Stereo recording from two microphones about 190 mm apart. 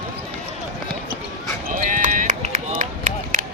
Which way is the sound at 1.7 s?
45° right (ahead or behind).